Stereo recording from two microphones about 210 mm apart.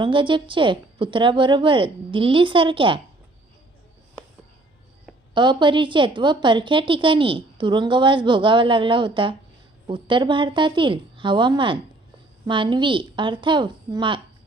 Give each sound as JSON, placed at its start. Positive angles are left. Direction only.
{"t": 0.0, "sound": "a woman's voice", "side_deg": -25}
{"t": 5.3, "sound": "a woman's voice", "side_deg": -20}